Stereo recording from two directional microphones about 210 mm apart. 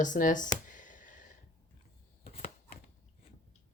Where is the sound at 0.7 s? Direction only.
40° left (ahead or behind).